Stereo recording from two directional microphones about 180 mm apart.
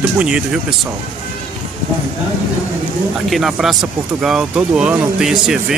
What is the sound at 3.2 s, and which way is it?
Speech, centre (ahead or behind).